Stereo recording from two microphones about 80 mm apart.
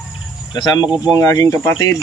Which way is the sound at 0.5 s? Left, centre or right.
Left.